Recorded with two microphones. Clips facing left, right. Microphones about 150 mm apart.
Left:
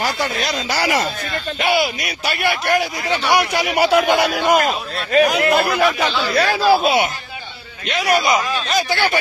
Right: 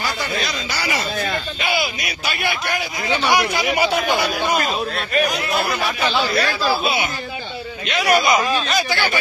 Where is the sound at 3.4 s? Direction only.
60° left (ahead or behind).